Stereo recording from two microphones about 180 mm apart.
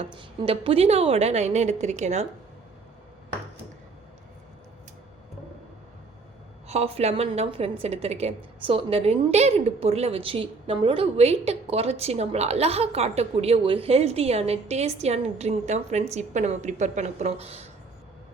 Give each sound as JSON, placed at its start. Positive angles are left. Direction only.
{"t": 0.0, "sound": "a woman's voice", "side_deg": -30}
{"t": 6.7, "sound": "a woman's voice", "side_deg": -35}